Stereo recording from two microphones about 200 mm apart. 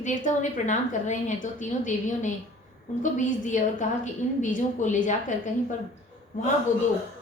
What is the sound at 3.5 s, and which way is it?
A woman's voice, 40° left (ahead or behind).